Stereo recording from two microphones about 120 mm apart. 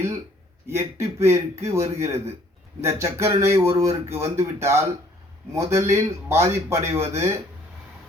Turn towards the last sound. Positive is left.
turn(degrees=-20)  # may be behind; listen again after turning